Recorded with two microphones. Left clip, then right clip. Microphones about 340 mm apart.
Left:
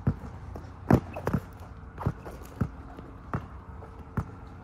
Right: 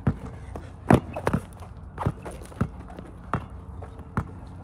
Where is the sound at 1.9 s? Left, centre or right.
Right.